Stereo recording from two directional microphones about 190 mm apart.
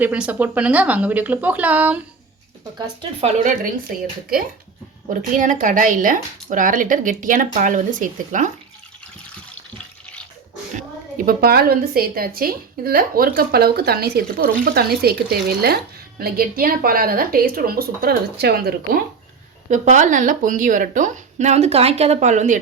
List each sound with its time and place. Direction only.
0.0 s speech: 5° right (ahead or behind)
2.7 s a woman's voice: 25° right (ahead or behind)
5.3 s a woman's voice: 45° right (ahead or behind)
11.3 s a woman's voice: 55° right (ahead or behind)
19.7 s a woman's voice: 40° right (ahead or behind)